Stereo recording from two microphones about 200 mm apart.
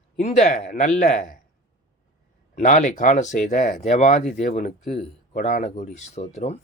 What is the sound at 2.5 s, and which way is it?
Speech, 40° left (ahead or behind).